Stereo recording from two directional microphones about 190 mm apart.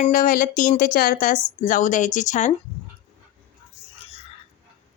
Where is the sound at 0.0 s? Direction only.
45° left (ahead or behind).